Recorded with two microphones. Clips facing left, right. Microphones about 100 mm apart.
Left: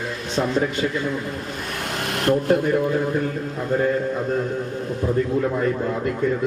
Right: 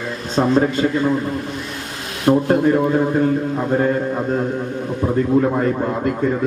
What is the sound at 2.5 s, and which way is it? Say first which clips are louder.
A man's voice: right 4 dB; 40° right (ahead or behind).